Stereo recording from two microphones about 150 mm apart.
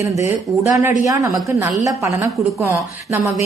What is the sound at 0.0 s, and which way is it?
A woman's voice, 20° right (ahead or behind).